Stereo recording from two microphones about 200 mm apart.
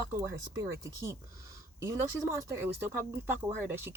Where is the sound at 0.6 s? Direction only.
15° right (ahead or behind).